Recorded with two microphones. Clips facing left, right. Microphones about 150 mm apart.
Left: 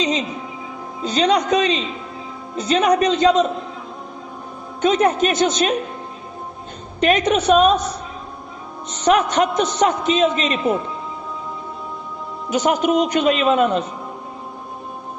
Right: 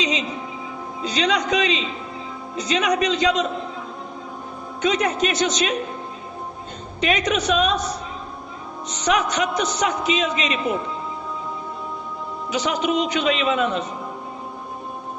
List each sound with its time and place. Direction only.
0.0 s music: 45° left (ahead or behind)
1.0 s a man's voice: 45° left (ahead or behind)
4.8 s a man's voice: 45° left (ahead or behind)
7.0 s a man's voice: 50° left (ahead or behind)
9.0 s a man's voice: 50° left (ahead or behind)
12.5 s a man's voice: 50° left (ahead or behind)